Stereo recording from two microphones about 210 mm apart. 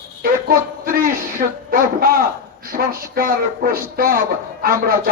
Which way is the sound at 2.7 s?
45° right (ahead or behind).